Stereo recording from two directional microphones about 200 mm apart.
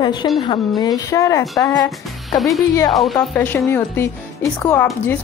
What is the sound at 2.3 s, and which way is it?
Speech, centre (ahead or behind).